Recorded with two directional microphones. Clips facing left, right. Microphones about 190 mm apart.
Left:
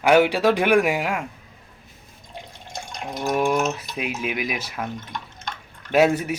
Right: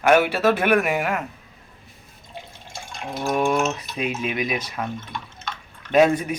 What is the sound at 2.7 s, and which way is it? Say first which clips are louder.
Water: even; 15° left (ahead or behind).